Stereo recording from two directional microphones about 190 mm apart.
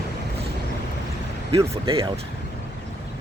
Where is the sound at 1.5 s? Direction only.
30° right (ahead or behind).